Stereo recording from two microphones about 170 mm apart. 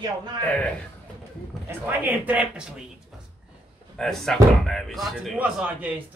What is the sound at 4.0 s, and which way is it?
A man's voice, 5° left (ahead or behind).